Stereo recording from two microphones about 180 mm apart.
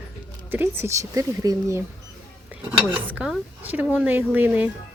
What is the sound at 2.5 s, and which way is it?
Speech, 5° right (ahead or behind).